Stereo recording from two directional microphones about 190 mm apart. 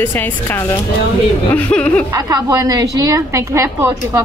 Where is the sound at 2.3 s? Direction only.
20° right (ahead or behind).